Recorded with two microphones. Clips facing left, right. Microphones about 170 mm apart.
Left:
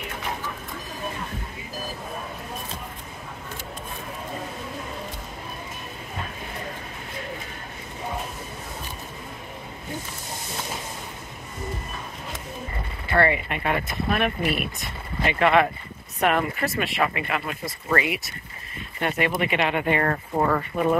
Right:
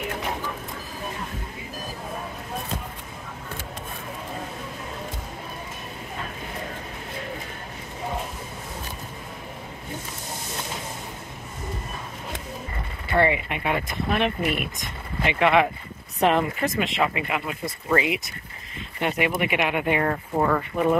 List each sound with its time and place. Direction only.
13.1 s speech: 15° right (ahead or behind)
16.2 s speech: 25° right (ahead or behind); by 21.0 s centre (ahead or behind)